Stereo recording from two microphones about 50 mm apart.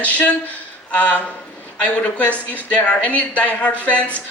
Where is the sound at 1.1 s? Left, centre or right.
Left.